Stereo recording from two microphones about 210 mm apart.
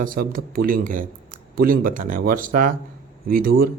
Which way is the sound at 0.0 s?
40° right (ahead or behind).